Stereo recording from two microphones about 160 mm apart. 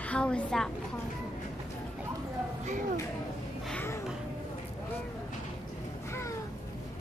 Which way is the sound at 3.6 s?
10° left (ahead or behind).